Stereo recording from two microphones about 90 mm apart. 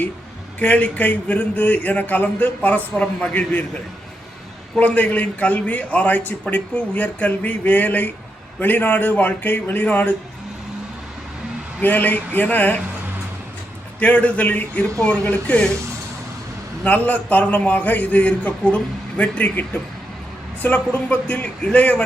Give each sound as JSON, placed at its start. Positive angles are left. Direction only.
{"t": 0.6, "sound": "a man's voice", "side_deg": 15}
{"t": 4.7, "sound": "a man's voice", "side_deg": 15}
{"t": 11.8, "sound": "speech", "side_deg": 20}
{"t": 14.0, "sound": "a man's voice", "side_deg": 15}
{"t": 16.8, "sound": "a man's voice", "side_deg": 15}